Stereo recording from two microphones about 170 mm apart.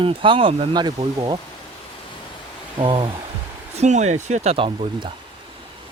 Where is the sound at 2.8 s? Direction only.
30° right (ahead or behind).